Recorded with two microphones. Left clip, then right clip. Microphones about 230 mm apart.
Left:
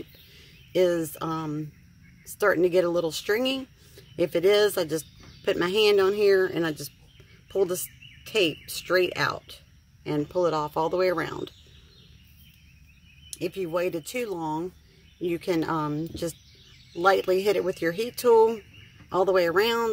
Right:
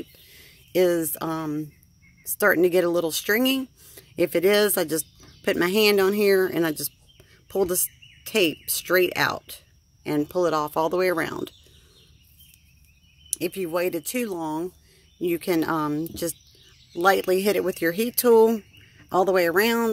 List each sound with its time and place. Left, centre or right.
0.3 s speech: right
13.3 s speech: right